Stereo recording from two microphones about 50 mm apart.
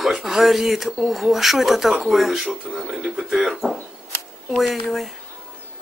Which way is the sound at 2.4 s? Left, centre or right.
Right.